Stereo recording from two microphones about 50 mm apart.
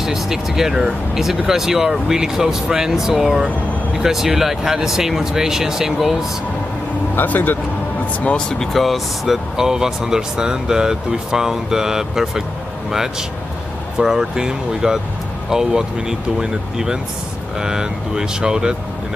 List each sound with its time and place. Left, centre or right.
0.0 s speech: centre
7.2 s speech: left
8.5 s speech: centre
13.9 s speech: centre